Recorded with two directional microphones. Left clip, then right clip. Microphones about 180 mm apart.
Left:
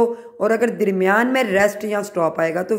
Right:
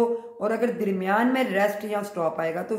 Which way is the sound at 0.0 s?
40° left (ahead or behind).